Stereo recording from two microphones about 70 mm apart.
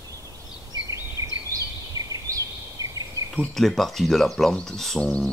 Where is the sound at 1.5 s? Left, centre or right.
Right.